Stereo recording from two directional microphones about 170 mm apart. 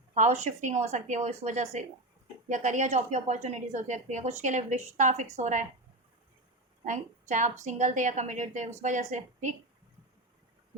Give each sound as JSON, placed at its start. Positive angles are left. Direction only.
{"t": 0.1, "sound": "a woman's voice", "side_deg": -45}
{"t": 6.8, "sound": "a woman's voice", "side_deg": -45}